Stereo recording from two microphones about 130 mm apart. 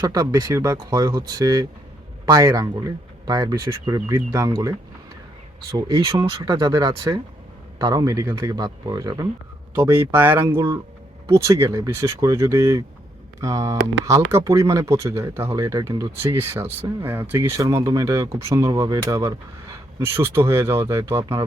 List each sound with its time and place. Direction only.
0.0 s speech: 30° right (ahead or behind)
5.7 s speech: 30° right (ahead or behind)
9.7 s speech: 20° right (ahead or behind)
16.2 s speech: 15° right (ahead or behind)